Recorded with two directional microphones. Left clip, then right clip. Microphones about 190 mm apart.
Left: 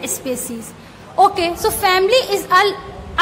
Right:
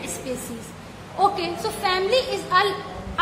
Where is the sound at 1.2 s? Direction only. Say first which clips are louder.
Left 8 dB; 40° left (ahead or behind).